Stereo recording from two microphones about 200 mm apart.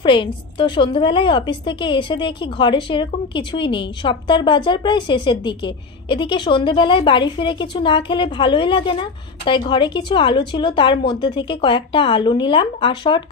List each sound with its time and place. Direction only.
0.0 s speech: 25° left (ahead or behind)